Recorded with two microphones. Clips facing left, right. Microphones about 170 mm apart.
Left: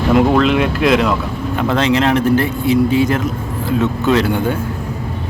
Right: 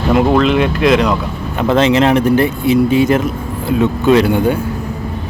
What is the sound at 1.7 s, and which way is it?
Speech, 20° right (ahead or behind).